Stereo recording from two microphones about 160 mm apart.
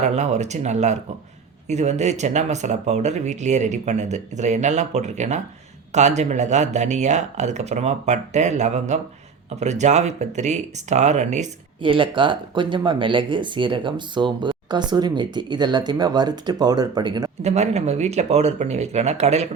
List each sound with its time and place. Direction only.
0.0 s speech: 45° right (ahead or behind)
11.8 s speech: 30° right (ahead or behind)
17.4 s speech: 40° right (ahead or behind)